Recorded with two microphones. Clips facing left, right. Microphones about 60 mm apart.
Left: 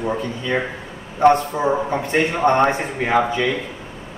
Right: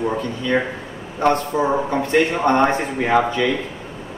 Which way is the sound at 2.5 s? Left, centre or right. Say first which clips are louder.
Left 3 dB; left.